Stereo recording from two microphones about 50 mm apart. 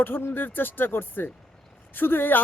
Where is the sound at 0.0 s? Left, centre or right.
Left.